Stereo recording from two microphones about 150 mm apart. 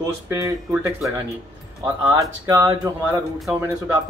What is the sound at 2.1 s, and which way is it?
Speech, 25° right (ahead or behind).